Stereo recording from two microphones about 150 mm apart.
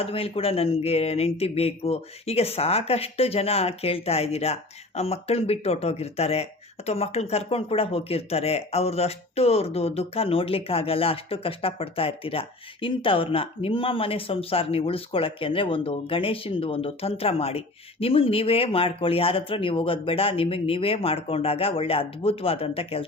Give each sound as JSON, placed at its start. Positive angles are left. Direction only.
{"t": 0.0, "sound": "speech", "side_deg": 40}